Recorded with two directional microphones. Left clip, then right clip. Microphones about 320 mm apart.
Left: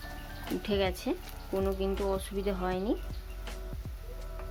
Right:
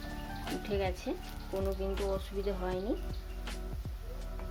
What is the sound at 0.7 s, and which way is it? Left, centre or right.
Speech, left.